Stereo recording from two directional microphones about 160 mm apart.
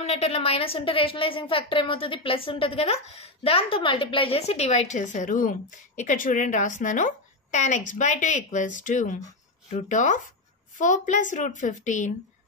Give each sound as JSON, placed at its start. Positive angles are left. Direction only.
{"t": 0.0, "sound": "a woman's voice", "side_deg": 40}